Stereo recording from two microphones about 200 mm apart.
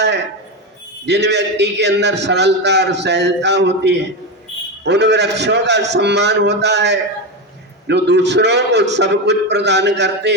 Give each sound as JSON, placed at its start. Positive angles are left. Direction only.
{"t": 1.0, "sound": "a man's voice", "side_deg": -55}